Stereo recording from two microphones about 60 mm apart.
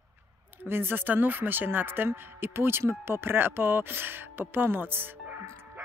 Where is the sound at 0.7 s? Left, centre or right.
Right.